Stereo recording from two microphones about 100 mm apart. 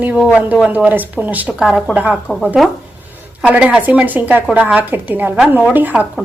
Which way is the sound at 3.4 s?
15° right (ahead or behind).